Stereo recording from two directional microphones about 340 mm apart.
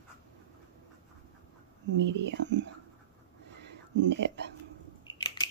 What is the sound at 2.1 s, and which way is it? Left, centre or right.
Speech, right.